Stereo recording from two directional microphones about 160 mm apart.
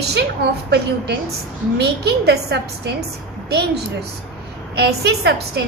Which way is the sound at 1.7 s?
90° right.